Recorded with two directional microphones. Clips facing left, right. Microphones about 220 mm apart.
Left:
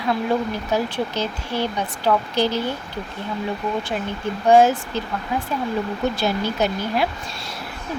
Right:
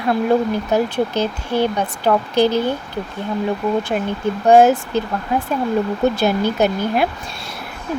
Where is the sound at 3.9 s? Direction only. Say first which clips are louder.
Right 5 dB; 55° right (ahead or behind).